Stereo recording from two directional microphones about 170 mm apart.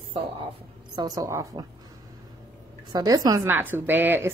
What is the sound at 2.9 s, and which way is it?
A woman's voice, 25° right (ahead or behind).